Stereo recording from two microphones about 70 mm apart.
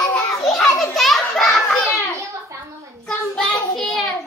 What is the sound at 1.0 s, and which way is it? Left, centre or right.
Children playing, centre.